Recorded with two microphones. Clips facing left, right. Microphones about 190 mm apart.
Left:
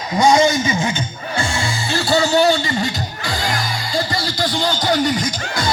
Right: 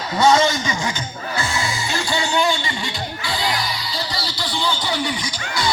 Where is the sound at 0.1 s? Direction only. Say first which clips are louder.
Left 2 dB; 15° left (ahead or behind).